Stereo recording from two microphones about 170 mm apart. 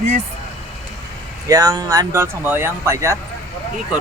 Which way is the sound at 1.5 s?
20° right (ahead or behind).